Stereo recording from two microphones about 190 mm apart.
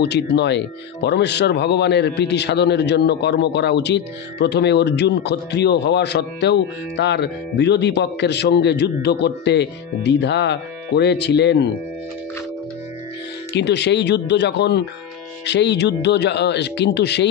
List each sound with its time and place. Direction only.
0.0 s speech: 60° left (ahead or behind)
13.6 s speech: 65° left (ahead or behind)